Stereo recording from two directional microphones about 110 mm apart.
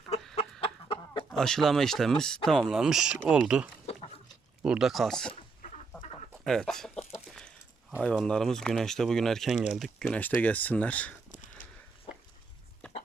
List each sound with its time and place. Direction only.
0.6 s chicken: 50° left (ahead or behind)
1.3 s speech: 5° left (ahead or behind)
6.4 s speech: 5° left (ahead or behind)
7.3 s chicken: 5° left (ahead or behind)
8.0 s speech: 5° left (ahead or behind)
10.0 s speech: 10° left (ahead or behind)
12.1 s a sound: 55° left (ahead or behind)
12.8 s a sound: 10° left (ahead or behind)